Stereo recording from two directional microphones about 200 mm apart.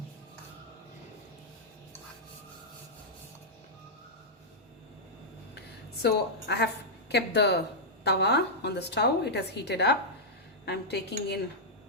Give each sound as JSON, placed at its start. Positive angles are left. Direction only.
{"t": 6.0, "sound": "a woman's voice", "side_deg": 55}